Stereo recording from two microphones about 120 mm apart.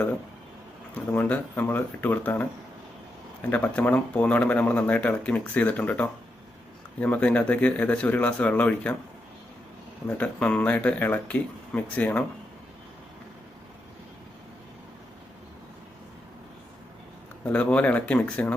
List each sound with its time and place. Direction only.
1.1 s speech: 15° left (ahead or behind)
3.5 s speech: 10° left (ahead or behind)
10.2 s speech: 10° left (ahead or behind)
17.4 s speech: 10° left (ahead or behind)